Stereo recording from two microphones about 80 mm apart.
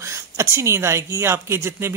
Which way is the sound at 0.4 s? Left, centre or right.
Right.